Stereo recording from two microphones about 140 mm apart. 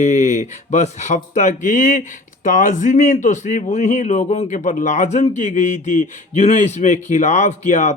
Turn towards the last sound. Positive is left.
turn(degrees=60)  # may be behind; listen again after turning